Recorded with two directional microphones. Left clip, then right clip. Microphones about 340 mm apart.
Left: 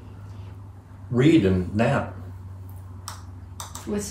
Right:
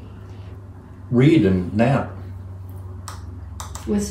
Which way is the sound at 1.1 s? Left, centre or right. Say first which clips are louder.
Right 3 dB; centre.